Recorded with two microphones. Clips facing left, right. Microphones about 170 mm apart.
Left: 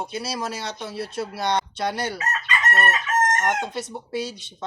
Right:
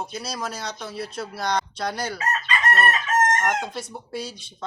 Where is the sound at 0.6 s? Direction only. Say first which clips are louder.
Left 1 dB; 25° left (ahead or behind).